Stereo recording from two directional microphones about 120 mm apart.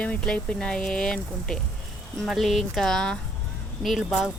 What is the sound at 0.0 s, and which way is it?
Speech, 10° left (ahead or behind).